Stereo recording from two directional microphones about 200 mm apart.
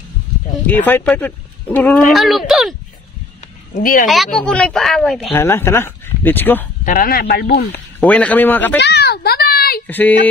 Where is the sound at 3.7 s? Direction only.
40° left (ahead or behind).